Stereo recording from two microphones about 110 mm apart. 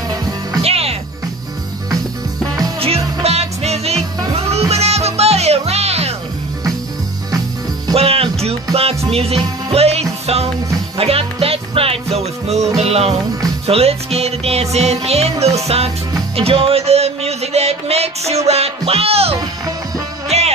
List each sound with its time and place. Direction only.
0.6 s music: 65° right (ahead or behind)
2.8 s music: 70° right (ahead or behind)
7.9 s music: 60° right (ahead or behind)
11.0 s music: 60° right (ahead or behind)
16.3 s music: 60° right (ahead or behind)
20.2 s music: 75° right (ahead or behind)